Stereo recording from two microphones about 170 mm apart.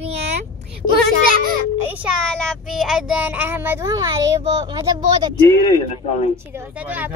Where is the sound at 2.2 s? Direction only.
5° left (ahead or behind); by 4.1 s 20° right (ahead or behind).